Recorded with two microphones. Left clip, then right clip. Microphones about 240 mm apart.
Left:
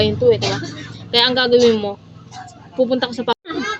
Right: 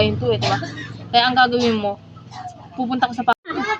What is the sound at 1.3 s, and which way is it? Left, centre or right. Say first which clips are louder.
Speech: left 3 dB; centre.